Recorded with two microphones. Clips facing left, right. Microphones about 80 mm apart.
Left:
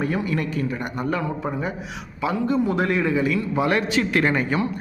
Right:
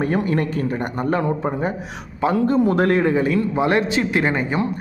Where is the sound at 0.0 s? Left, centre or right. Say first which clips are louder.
Right 4 dB; right.